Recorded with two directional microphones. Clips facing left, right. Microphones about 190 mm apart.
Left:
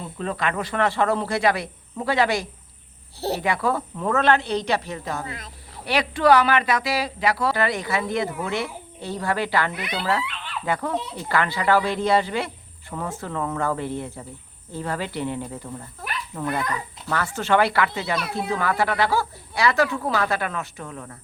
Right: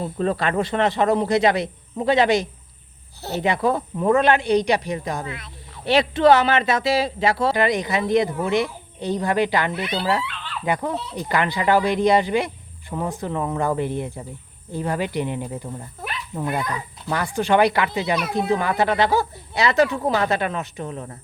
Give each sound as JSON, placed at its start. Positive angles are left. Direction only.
{"t": 0.0, "sound": "speech", "side_deg": -35}
{"t": 5.2, "sound": "snake", "side_deg": 40}
{"t": 5.8, "sound": "speech", "side_deg": -25}